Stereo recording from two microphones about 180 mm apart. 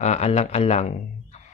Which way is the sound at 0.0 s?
35° left (ahead or behind).